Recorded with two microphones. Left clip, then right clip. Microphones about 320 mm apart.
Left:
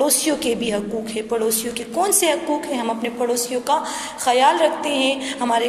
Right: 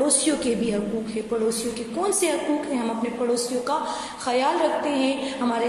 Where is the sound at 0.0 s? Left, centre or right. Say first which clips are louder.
Left 3 dB; centre.